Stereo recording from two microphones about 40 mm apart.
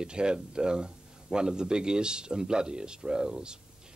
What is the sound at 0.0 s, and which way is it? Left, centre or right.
Speech, right.